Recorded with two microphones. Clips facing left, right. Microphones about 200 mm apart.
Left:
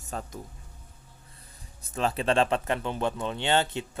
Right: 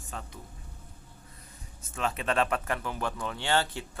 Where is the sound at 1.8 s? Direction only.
35° left (ahead or behind).